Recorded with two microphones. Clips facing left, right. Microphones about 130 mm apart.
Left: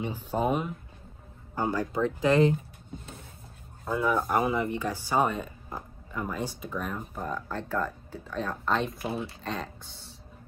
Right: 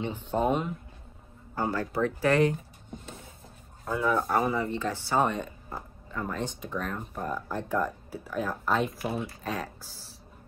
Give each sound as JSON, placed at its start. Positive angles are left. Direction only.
{"t": 0.3, "sound": "speech", "side_deg": 5}
{"t": 1.5, "sound": "speech", "side_deg": 15}
{"t": 3.9, "sound": "speech", "side_deg": 10}
{"t": 7.2, "sound": "speech", "side_deg": -5}